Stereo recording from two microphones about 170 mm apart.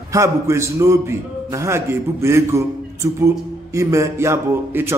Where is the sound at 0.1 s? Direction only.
15° right (ahead or behind).